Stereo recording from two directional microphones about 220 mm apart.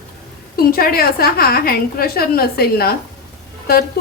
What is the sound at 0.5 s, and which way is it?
A woman's voice, 40° left (ahead or behind).